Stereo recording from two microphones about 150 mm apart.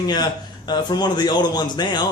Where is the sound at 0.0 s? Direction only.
25° left (ahead or behind).